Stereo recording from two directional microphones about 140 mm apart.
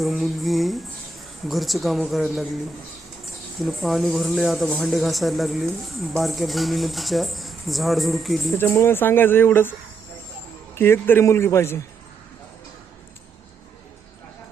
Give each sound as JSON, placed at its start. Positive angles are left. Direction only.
{"t": 0.0, "sound": "speech", "side_deg": 0}
{"t": 3.6, "sound": "speech", "side_deg": 0}
{"t": 8.5, "sound": "speech", "side_deg": 15}
{"t": 10.8, "sound": "speech", "side_deg": 15}